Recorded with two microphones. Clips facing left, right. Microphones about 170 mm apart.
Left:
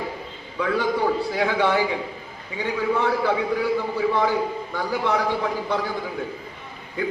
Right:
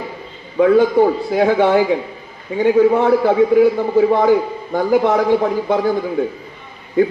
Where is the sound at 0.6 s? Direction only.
45° right (ahead or behind).